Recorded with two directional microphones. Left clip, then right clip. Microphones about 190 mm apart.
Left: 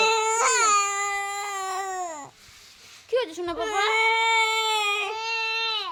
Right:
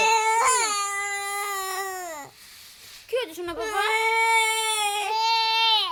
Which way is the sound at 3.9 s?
55° left (ahead or behind).